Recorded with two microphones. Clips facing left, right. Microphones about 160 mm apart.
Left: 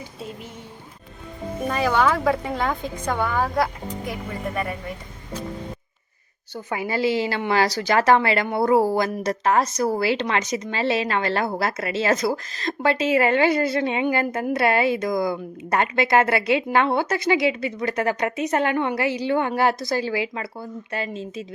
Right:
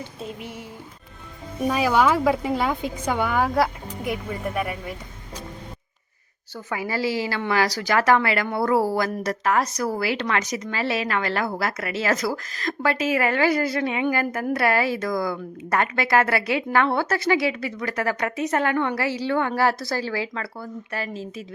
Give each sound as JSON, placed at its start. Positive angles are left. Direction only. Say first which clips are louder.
{"t": 1.6, "sound": "speech", "louder": "right 1 dB", "side_deg": -5}
{"t": 3.4, "sound": "speech", "louder": "right 1 dB", "side_deg": 0}
{"t": 6.5, "sound": "a woman's voice", "louder": "left 2 dB", "side_deg": 25}